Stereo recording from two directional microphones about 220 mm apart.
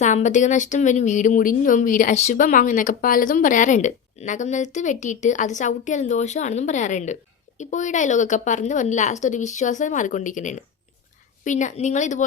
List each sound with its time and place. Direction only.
0.0 s speech: 35° left (ahead or behind)